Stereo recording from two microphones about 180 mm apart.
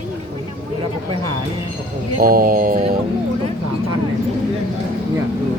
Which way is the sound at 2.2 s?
55° right (ahead or behind).